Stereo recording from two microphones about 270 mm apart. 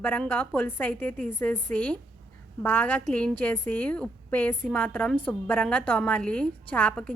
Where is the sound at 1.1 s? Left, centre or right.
Right.